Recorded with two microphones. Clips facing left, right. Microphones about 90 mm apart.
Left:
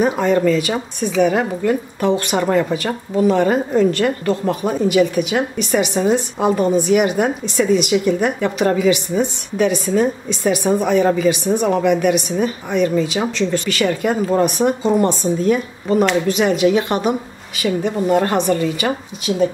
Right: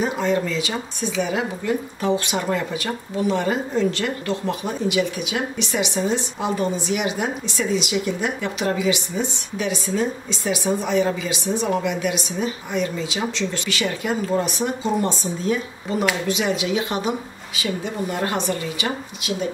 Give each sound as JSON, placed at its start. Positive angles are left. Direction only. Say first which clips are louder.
{"t": 0.0, "sound": "speech", "louder": "left 6 dB", "side_deg": 55}